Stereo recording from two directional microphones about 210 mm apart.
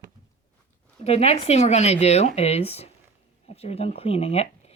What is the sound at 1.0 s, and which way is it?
Speech, 30° left (ahead or behind).